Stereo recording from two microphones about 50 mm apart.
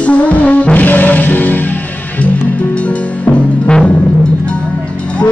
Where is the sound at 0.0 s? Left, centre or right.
Left.